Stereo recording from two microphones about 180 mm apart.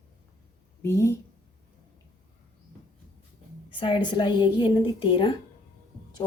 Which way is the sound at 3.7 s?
25° left (ahead or behind).